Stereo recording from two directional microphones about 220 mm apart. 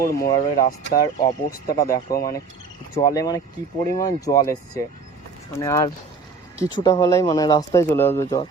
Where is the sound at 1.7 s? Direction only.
15° left (ahead or behind).